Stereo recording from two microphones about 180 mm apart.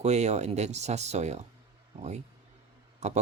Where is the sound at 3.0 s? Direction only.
40° right (ahead or behind).